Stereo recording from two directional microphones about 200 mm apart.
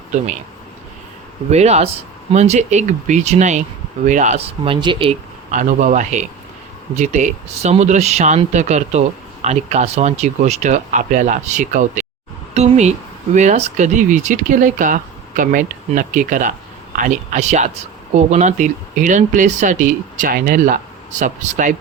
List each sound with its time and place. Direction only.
1.5 s speech: 35° right (ahead or behind)
5.5 s speech: 40° right (ahead or behind)
12.5 s a sound: 35° right (ahead or behind)
13.3 s speech: 35° right (ahead or behind)